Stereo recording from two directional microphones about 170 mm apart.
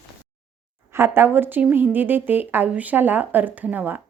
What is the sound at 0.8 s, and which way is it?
Speech, 15° right (ahead or behind).